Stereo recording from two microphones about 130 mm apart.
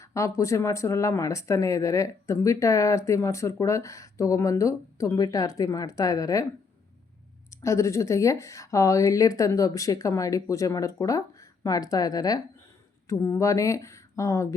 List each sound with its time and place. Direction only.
0.0 s speech: 25° left (ahead or behind)
7.5 s speech: 25° left (ahead or behind)